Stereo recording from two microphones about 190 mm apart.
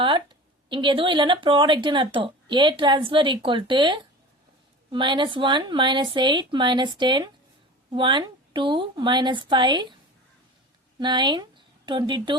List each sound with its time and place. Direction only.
0.0 s speech: 25° right (ahead or behind)
11.0 s speech: 25° right (ahead or behind)